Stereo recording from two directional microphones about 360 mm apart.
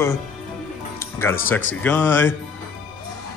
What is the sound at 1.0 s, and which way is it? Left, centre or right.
Music, centre.